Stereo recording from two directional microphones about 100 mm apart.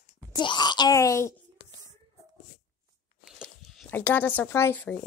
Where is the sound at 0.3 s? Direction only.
50° left (ahead or behind).